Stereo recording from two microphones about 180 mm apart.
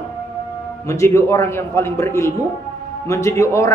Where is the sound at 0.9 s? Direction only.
15° left (ahead or behind).